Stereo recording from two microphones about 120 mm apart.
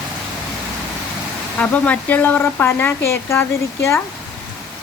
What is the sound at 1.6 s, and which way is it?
Speech, 10° left (ahead or behind).